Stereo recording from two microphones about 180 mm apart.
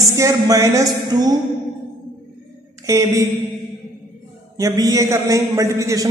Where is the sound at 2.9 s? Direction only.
20° right (ahead or behind).